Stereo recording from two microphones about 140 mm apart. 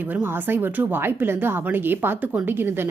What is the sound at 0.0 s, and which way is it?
Speech, 10° right (ahead or behind).